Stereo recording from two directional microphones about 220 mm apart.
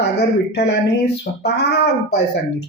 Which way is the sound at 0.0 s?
50° left (ahead or behind).